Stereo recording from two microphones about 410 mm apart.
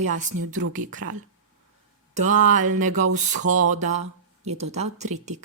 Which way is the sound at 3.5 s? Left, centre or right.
Right.